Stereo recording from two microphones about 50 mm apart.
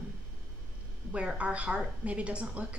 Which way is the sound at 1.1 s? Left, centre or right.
Right.